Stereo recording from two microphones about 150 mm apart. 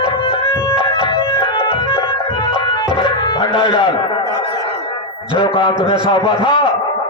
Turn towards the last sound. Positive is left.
turn(degrees=35)  # may be behind; listen again after turning